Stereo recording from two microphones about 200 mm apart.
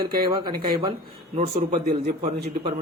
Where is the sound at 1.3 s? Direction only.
35° right (ahead or behind).